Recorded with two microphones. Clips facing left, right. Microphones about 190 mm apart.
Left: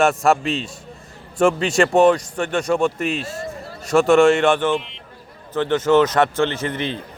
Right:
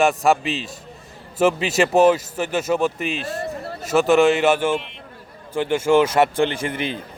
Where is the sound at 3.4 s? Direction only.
65° right (ahead or behind).